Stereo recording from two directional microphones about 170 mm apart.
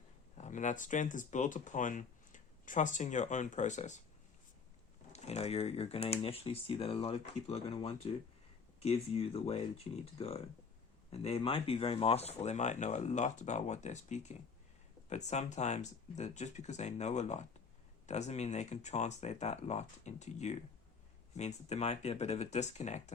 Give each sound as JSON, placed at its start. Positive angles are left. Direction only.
{"t": 0.3, "sound": "speech", "side_deg": 45}
{"t": 5.1, "sound": "speech", "side_deg": 40}